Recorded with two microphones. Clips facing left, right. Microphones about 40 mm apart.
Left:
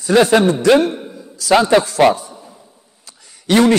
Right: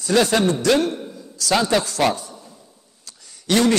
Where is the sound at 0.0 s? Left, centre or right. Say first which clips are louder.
Left 6 dB; centre.